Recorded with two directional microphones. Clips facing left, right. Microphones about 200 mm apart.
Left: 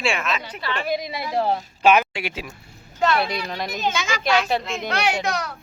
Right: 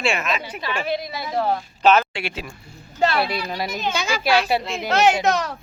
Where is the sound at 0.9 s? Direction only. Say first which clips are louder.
Left 1 dB; 10° left (ahead or behind).